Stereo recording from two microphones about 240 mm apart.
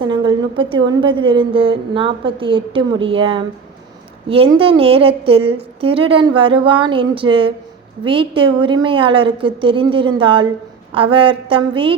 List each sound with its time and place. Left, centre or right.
0.0 s a woman's voice: centre
4.5 s a woman's voice: right